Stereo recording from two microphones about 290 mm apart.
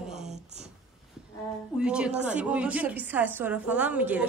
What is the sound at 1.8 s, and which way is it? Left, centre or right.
A woman's voice, centre.